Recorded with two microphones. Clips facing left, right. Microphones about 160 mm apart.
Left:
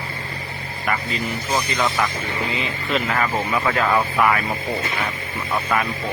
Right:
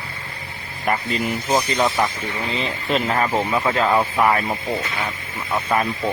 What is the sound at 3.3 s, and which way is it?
Speech, 20° right (ahead or behind).